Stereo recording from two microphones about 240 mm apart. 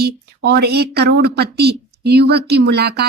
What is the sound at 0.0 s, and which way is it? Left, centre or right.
Speech, right.